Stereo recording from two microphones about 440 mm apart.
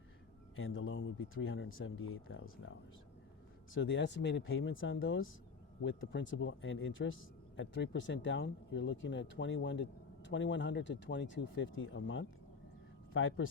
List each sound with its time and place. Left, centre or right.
0.5 s speech: left
3.8 s speech: left